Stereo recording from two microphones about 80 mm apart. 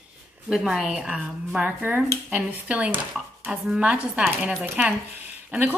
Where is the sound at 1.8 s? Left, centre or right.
Right.